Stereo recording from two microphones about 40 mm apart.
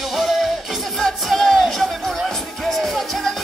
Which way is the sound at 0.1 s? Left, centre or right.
Centre.